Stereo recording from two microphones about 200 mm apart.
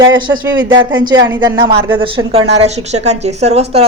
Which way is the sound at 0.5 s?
20° right (ahead or behind).